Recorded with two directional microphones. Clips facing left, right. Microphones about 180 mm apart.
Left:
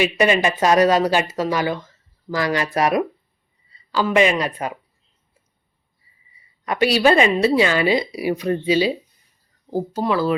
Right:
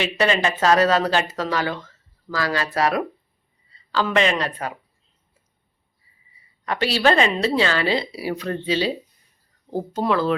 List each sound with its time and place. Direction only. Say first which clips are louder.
0.0 s speech: left 3 dB; 15° left (ahead or behind)
6.7 s speech: left 3 dB; 15° left (ahead or behind)